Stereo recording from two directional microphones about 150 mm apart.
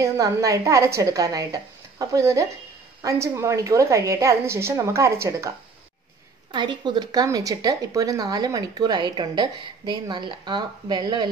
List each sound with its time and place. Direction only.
0.0 s speech: 20° right (ahead or behind)
6.5 s speech: 30° right (ahead or behind)